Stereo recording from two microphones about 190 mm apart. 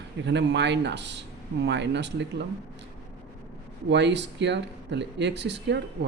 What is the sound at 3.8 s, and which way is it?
Speech, 65° right (ahead or behind).